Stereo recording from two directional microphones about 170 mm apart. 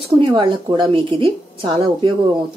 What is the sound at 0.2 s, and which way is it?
A woman's voice, 30° right (ahead or behind).